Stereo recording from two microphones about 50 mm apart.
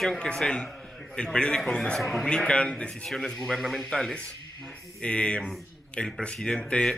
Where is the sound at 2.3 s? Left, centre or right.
Left.